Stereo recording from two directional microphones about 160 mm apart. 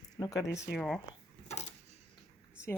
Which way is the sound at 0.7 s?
Centre (ahead or behind).